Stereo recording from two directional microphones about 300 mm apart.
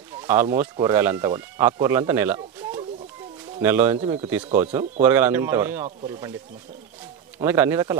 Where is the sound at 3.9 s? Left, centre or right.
Centre.